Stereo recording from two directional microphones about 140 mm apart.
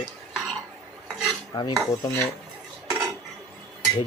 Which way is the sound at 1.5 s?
25° left (ahead or behind).